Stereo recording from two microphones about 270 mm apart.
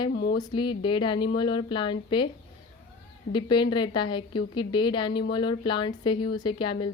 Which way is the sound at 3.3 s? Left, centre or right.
Centre.